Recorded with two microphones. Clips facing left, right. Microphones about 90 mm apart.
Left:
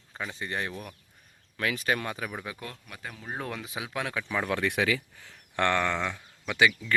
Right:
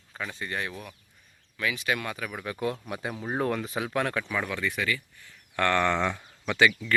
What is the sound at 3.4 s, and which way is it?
Speech, centre (ahead or behind).